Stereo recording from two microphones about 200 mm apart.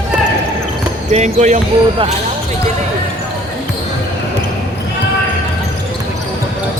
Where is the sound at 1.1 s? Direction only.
35° right (ahead or behind).